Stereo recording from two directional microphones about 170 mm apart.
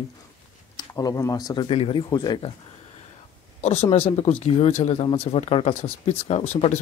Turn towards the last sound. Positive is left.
turn(degrees=40)  # may be behind; listen again after turning